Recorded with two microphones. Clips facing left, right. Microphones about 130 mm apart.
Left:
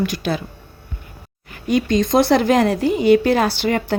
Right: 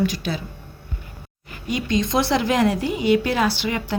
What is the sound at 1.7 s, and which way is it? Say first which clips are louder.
Speech: left 5 dB; 50° left (ahead or behind).